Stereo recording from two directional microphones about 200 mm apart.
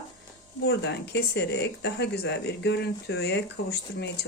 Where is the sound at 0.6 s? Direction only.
60° left (ahead or behind).